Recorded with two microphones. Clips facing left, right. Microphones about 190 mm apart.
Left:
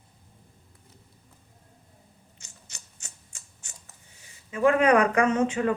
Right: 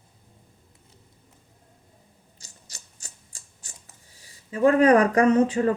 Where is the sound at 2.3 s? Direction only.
35° right (ahead or behind).